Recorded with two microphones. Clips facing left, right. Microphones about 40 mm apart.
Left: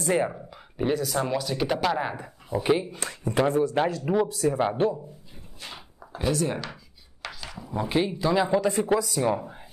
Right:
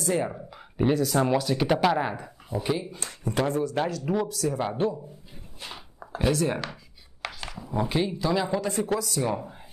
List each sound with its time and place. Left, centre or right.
0.0 s speech: left
0.3 s speech: centre
2.1 s speech: centre
4.3 s speech: left
6.1 s speech: centre
7.4 s a sound: centre
7.9 s speech: centre